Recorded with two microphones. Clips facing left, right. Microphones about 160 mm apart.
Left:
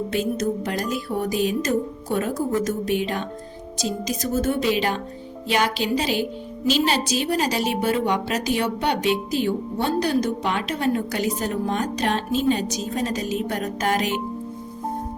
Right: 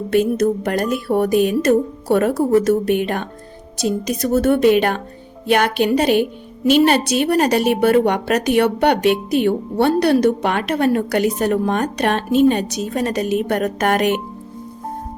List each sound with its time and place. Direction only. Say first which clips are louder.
0.1 s a woman's voice: right 11 dB; 60° right (ahead or behind)